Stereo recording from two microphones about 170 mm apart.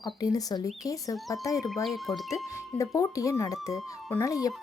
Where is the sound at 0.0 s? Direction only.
20° left (ahead or behind).